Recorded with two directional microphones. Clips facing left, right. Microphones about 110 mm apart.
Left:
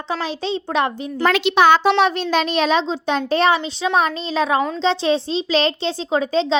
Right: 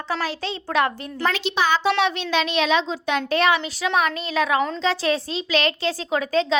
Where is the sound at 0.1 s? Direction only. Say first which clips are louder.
Left 4 dB; 20° left (ahead or behind).